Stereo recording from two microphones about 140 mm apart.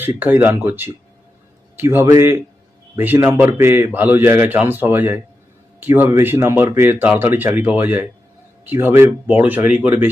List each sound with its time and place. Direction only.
0.2 s a man's voice: 15° right (ahead or behind)